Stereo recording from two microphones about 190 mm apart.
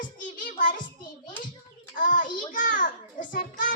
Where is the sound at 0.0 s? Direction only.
45° left (ahead or behind).